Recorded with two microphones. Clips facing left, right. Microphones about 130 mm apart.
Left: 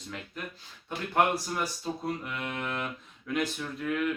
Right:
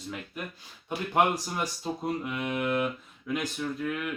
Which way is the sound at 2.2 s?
15° right (ahead or behind).